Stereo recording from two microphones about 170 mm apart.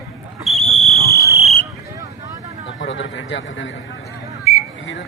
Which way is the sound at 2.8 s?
90° left.